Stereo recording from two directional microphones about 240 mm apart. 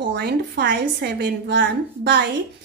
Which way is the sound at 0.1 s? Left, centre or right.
Right.